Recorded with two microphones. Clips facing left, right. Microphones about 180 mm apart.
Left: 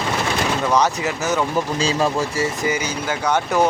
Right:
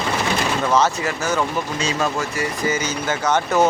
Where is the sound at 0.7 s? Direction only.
15° left (ahead or behind).